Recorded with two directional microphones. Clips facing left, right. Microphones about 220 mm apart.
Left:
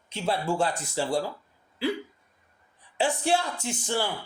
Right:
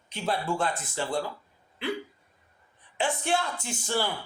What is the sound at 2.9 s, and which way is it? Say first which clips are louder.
Speech: left 3 dB; 35° left (ahead or behind).